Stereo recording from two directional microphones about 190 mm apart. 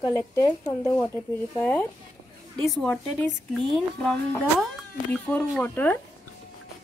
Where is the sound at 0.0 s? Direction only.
15° left (ahead or behind); by 4.1 s centre (ahead or behind).